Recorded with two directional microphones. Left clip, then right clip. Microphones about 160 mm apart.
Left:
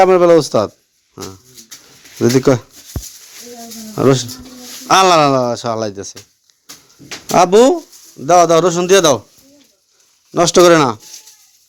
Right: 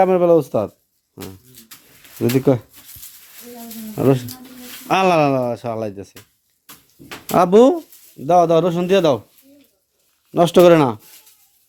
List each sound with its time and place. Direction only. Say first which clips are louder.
0.0 s speech: left 5 dB; centre (ahead or behind)
1.1 s bird: left 5 dB; 5° right (ahead or behind)
2.2 s speech: left 5 dB; centre (ahead or behind)
3.9 s speech: left 4 dB; centre (ahead or behind)
7.3 s speech: left 3 dB; 15° right (ahead or behind)
8.2 s a man's voice: left 4 dB; 5° right (ahead or behind)
10.3 s speech: left 2 dB; 20° right (ahead or behind)